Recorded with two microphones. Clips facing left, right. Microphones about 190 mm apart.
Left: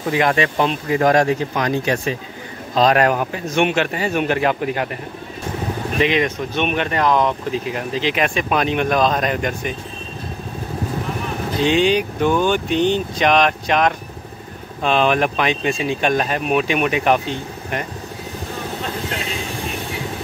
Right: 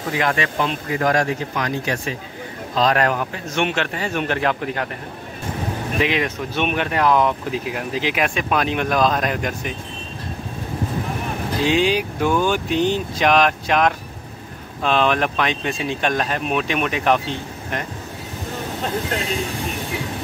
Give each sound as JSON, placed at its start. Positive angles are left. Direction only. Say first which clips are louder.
{"t": 0.2, "sound": "speech", "louder": "left 4 dB", "side_deg": 25}
{"t": 5.9, "sound": "speech", "louder": "left 3 dB", "side_deg": -5}
{"t": 11.6, "sound": "speech", "louder": "left 2 dB", "side_deg": -5}